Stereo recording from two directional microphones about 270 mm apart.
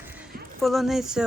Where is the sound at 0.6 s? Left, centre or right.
Centre.